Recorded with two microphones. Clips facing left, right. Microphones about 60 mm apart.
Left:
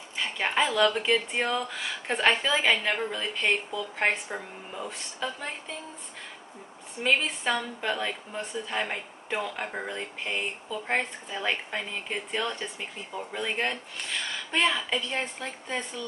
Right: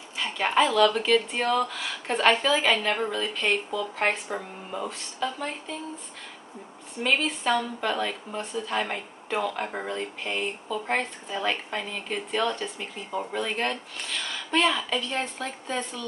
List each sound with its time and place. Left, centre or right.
0.1 s speech: centre
4.8 s speech: centre
7.0 s speech: centre